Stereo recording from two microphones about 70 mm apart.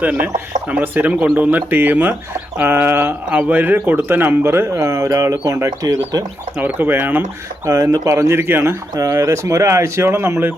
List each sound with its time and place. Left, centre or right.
0.7 s speech: right
5.8 s speech: right
6.6 s speech: right
7.6 s speech: right
7.9 s speech: right
9.0 s speech: right